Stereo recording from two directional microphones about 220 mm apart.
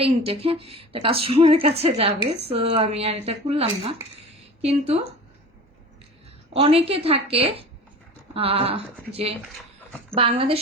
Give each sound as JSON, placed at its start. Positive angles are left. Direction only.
{"t": 0.0, "sound": "a woman's voice", "side_deg": -25}
{"t": 6.5, "sound": "a woman's voice", "side_deg": -25}